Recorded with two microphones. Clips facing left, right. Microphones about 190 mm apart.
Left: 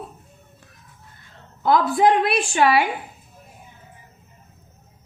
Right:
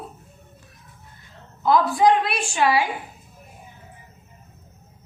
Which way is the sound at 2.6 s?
60° left (ahead or behind).